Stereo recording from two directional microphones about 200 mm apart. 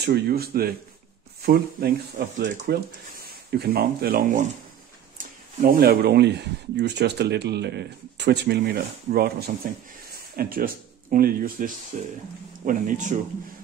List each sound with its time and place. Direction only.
0.0 s speech: 50° right (ahead or behind)